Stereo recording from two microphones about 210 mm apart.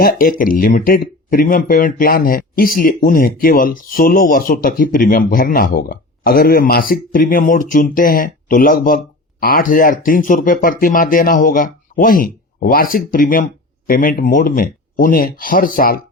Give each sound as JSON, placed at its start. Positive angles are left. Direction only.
{"t": 0.0, "sound": "speech", "side_deg": 45}